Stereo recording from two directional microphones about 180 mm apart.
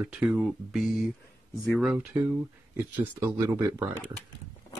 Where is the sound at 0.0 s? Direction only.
5° right (ahead or behind).